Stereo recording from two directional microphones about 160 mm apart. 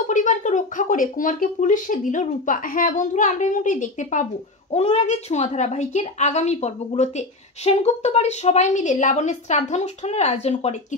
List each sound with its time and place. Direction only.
0.1 s speech: 50° left (ahead or behind)